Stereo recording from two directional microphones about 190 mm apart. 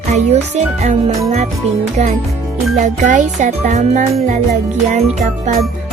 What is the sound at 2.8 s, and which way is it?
Music, 40° right (ahead or behind).